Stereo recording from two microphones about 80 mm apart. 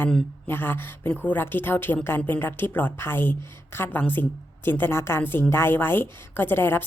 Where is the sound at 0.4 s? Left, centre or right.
Left.